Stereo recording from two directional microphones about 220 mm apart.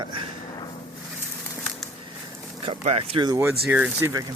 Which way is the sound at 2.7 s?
25° right (ahead or behind).